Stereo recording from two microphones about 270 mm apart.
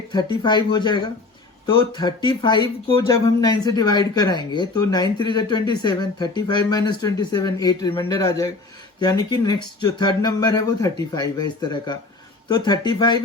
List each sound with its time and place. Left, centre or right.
0.1 s speech: centre